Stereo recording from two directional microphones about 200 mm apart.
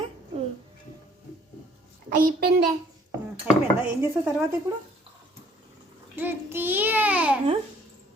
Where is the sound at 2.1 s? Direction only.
45° right (ahead or behind).